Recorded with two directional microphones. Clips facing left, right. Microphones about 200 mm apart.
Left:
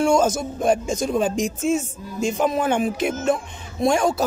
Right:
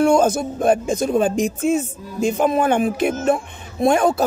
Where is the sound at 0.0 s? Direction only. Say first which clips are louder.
Right 3 dB; 60° right (ahead or behind).